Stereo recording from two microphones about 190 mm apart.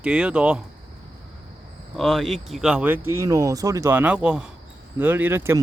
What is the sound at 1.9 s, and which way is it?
Speech, centre (ahead or behind).